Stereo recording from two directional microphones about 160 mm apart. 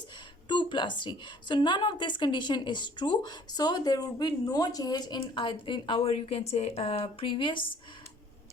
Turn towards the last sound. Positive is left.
turn(degrees=30)  # may be behind; listen again after turning